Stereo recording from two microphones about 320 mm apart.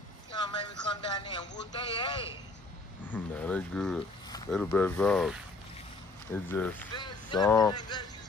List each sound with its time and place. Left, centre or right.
0.3 s a sound: centre
1.1 s speech: centre
3.1 s speech: centre